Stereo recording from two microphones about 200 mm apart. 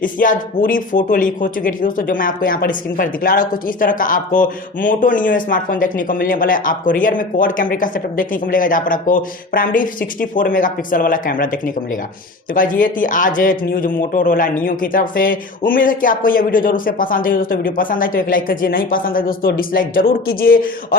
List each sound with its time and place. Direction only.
0.0 s speech: 40° left (ahead or behind)